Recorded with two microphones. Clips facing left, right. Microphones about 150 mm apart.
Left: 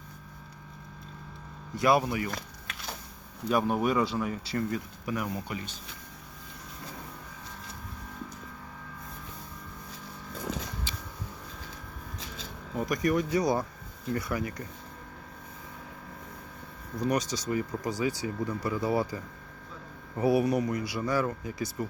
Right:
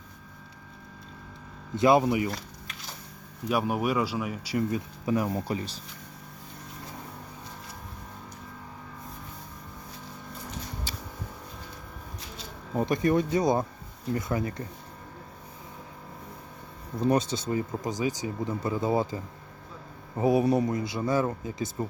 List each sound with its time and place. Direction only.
1.7 s speech: 20° right (ahead or behind)
3.5 s speech: 10° right (ahead or behind)
5.0 s speech: 30° right (ahead or behind)
12.7 s speech: 30° right (ahead or behind)
17.0 s speech: 25° right (ahead or behind)